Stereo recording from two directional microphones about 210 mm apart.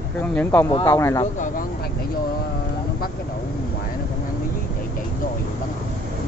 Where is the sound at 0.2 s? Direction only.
10° left (ahead or behind).